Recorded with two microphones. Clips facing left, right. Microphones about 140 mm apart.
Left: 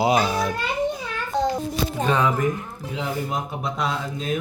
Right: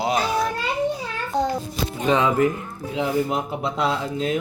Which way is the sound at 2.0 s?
20° right (ahead or behind).